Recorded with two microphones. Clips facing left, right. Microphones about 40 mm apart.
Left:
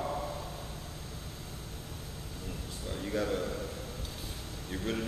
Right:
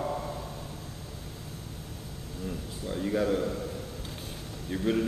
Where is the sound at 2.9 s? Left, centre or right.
Centre.